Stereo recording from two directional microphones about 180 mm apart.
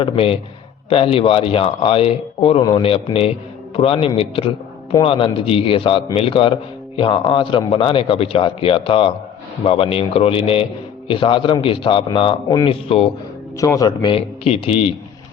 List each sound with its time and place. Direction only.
0.0 s a man's voice: 30° left (ahead or behind)
13.6 s speech: 20° left (ahead or behind)